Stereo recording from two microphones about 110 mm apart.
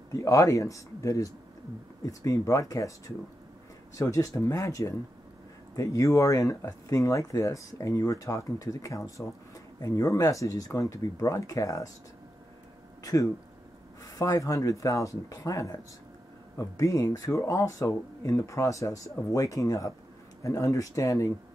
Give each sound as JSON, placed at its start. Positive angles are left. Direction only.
{"t": 0.1, "sound": "speech", "side_deg": 30}
{"t": 3.9, "sound": "speech", "side_deg": 30}
{"t": 13.0, "sound": "speech", "side_deg": 30}